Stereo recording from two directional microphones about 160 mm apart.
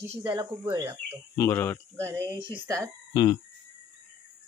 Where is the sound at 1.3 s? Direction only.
15° left (ahead or behind).